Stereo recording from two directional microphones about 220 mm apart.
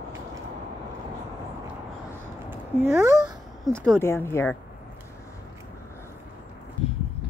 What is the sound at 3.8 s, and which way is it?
Speech, 10° left (ahead or behind).